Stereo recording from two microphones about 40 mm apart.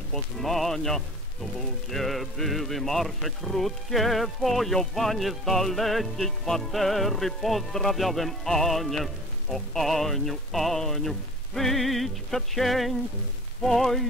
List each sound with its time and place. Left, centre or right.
0.1 s speech: centre
13.6 s music: centre